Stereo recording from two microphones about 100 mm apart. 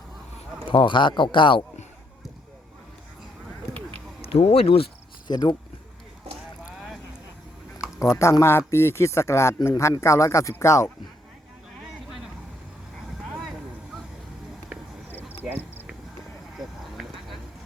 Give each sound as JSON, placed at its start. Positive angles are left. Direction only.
{"t": 0.7, "sound": "speech", "side_deg": 55}
{"t": 4.2, "sound": "speech", "side_deg": 85}
{"t": 5.3, "sound": "speech", "side_deg": 45}
{"t": 6.7, "sound": "vehicle", "side_deg": -5}
{"t": 7.9, "sound": "speech", "side_deg": 30}
{"t": 15.4, "sound": "cricket", "side_deg": -15}